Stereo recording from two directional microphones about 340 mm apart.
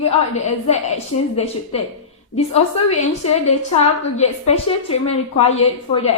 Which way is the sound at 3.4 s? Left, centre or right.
Centre.